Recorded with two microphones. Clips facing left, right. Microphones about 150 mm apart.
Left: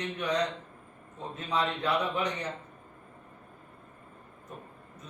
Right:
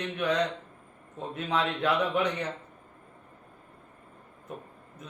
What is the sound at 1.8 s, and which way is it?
Speech, 60° right (ahead or behind).